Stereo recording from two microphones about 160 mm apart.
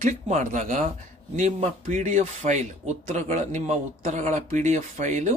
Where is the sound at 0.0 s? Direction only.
50° right (ahead or behind).